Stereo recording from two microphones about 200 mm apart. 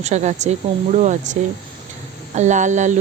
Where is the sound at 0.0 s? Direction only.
35° right (ahead or behind).